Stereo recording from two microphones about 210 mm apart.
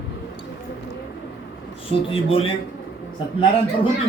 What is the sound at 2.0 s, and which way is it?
Speech, 25° left (ahead or behind).